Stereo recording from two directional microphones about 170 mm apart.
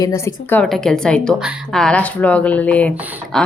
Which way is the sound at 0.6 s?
Centre (ahead or behind).